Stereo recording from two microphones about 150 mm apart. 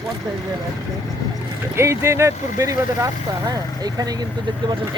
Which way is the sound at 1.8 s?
20° right (ahead or behind).